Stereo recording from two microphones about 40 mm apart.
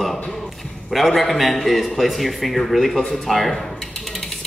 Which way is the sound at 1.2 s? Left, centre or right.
Centre.